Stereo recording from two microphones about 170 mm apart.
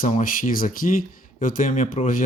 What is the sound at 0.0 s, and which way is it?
Speech, 50° left (ahead or behind).